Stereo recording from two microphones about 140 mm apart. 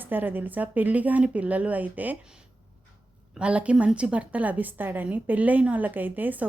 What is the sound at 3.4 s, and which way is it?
Speech, 10° right (ahead or behind).